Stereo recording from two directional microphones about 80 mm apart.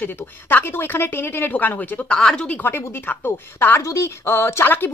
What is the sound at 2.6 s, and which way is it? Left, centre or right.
A woman's voice, left.